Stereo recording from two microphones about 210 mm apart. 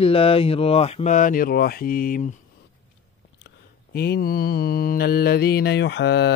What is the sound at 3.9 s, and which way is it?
Mantra, 45° left (ahead or behind).